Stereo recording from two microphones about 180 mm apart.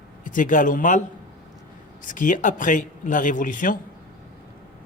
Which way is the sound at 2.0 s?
45° left (ahead or behind).